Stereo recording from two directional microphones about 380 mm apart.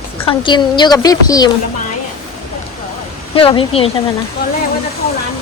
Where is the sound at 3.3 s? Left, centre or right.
Centre.